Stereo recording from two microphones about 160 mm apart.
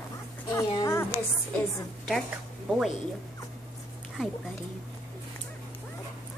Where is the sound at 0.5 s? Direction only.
20° left (ahead or behind).